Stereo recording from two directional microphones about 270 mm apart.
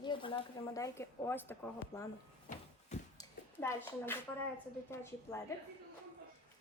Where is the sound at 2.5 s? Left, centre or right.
Left.